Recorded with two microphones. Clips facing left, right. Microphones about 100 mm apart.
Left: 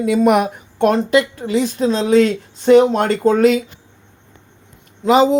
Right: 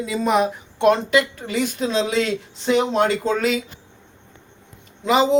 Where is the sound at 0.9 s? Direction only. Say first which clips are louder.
Left 1 dB; 40° left (ahead or behind).